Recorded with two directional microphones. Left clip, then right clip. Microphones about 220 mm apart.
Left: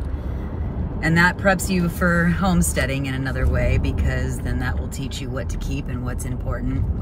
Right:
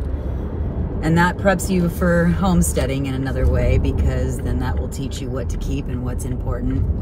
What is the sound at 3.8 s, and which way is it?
Speech, 10° right (ahead or behind).